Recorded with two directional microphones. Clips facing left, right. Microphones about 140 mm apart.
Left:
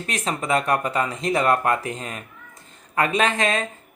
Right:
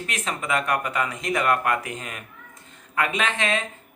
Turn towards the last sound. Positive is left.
turn(degrees=40)  # may be behind; listen again after turning